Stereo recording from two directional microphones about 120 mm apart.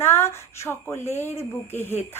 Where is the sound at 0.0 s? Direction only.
20° left (ahead or behind).